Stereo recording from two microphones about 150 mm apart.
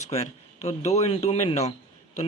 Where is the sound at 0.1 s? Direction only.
45° left (ahead or behind).